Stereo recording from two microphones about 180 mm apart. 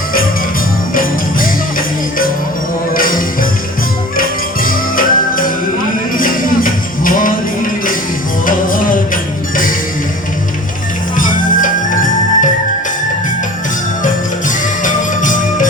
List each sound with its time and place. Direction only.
2.9 s music: 50° left (ahead or behind)
8.4 s music: 50° left (ahead or behind)
11.2 s music: 50° left (ahead or behind)
14.8 s music: 45° left (ahead or behind)